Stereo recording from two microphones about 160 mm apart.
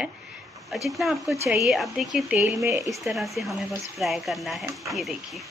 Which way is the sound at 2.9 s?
Centre (ahead or behind).